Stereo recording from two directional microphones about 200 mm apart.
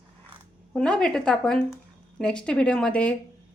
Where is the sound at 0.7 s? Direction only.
5° left (ahead or behind).